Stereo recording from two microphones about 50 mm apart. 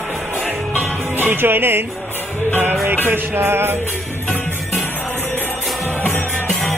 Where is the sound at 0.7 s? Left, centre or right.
Right.